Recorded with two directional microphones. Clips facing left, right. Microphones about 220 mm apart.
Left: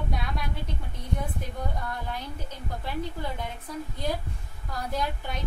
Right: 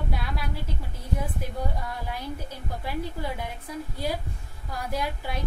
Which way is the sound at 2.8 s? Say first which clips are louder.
Right 1 dB; 10° right (ahead or behind).